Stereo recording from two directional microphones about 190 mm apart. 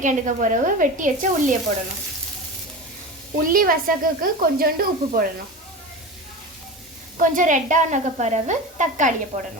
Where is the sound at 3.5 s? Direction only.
45° right (ahead or behind).